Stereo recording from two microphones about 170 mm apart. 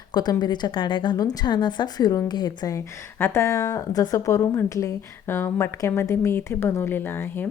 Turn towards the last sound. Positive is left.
turn(degrees=10)  # may be behind; listen again after turning